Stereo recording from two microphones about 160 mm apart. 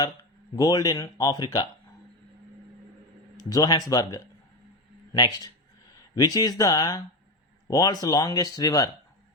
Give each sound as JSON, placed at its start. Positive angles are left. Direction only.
{"t": 0.5, "sound": "speech", "side_deg": 25}
{"t": 3.3, "sound": "speech", "side_deg": 25}